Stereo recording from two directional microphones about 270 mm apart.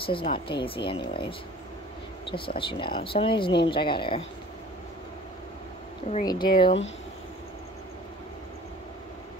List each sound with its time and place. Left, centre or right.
0.0 s speech: centre
2.2 s speech: centre
6.0 s speech: centre